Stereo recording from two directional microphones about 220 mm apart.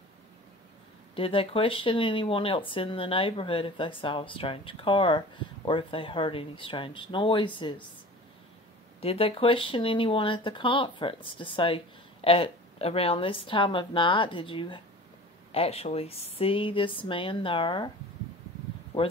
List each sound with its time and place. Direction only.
1.1 s speech: 25° left (ahead or behind)
9.0 s speech: 25° left (ahead or behind)